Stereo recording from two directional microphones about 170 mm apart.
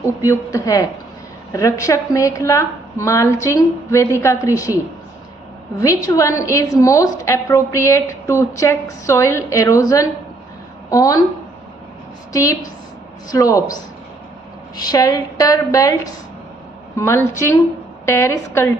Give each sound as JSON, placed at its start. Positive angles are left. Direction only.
{"t": 0.3, "sound": "a woman's voice", "side_deg": 20}
{"t": 5.8, "sound": "a woman's voice", "side_deg": 20}
{"t": 12.3, "sound": "a woman's voice", "side_deg": 20}
{"t": 14.8, "sound": "a woman's voice", "side_deg": 20}
{"t": 17.0, "sound": "a woman's voice", "side_deg": 15}